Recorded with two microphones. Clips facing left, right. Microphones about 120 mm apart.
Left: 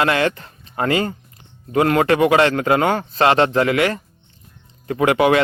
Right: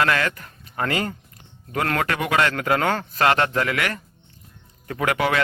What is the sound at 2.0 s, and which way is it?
A man's voice, 30° left (ahead or behind).